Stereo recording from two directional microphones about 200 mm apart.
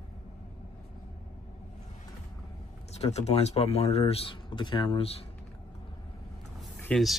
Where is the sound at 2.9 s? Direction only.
35° left (ahead or behind).